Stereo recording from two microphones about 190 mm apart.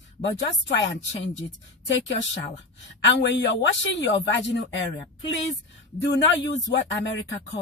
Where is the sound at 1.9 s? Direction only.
75° left (ahead or behind).